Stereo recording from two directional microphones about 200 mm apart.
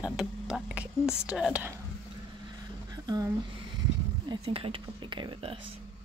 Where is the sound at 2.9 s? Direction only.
20° right (ahead or behind).